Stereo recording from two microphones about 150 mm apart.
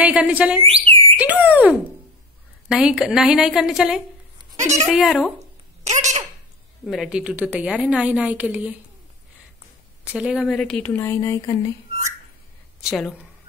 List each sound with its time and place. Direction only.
0.0 s a woman's voice: 10° right (ahead or behind)
0.8 s a sound: 40° right (ahead or behind)
1.1 s a woman's voice: 10° right (ahead or behind)
4.6 s speech: 50° right (ahead or behind)
4.8 s a woman's voice: centre (ahead or behind)
5.9 s speech: 50° right (ahead or behind)
6.9 s a woman's voice: 5° right (ahead or behind)
10.1 s a woman's voice: 5° right (ahead or behind)
10.8 s speech: 15° left (ahead or behind)
12.8 s a woman's voice: 5° left (ahead or behind)